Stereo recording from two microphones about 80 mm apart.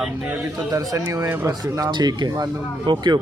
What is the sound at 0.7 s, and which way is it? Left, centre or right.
Speech, right.